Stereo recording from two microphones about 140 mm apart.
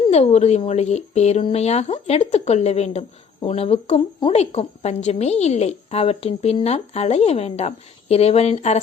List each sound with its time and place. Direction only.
0.1 s a woman's voice: 50° left (ahead or behind)